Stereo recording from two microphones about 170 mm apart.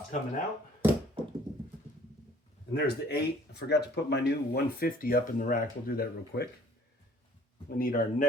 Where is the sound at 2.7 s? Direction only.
70° left (ahead or behind).